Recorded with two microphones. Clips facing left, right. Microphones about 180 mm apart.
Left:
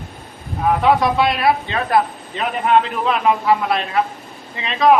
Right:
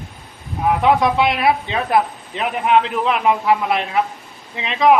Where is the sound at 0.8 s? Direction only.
20° right (ahead or behind).